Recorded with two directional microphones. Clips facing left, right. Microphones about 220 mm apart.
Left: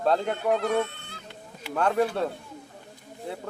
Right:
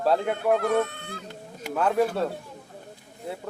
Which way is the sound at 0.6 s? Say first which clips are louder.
Right 2 dB; 50° right (ahead or behind).